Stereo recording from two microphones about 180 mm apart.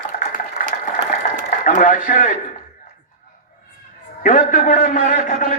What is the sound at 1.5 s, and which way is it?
Speech, 45° left (ahead or behind).